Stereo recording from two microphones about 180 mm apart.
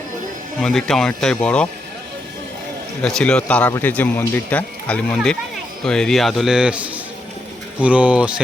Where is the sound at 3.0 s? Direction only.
5° left (ahead or behind).